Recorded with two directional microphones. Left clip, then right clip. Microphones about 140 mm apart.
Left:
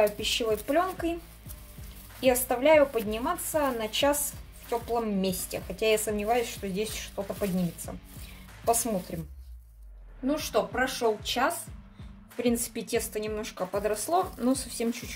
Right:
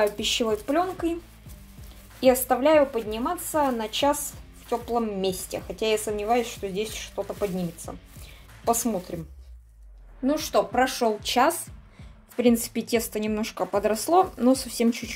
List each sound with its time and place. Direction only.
0.0 s speech: 55° right (ahead or behind)
0.7 s a woman's voice: 25° right (ahead or behind)
2.1 s a woman's voice: 30° right (ahead or behind)
10.2 s speech: 80° right
12.4 s speech: 50° right (ahead or behind)